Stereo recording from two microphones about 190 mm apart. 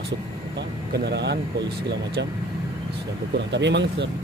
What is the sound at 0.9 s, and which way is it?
Speech, 65° right (ahead or behind).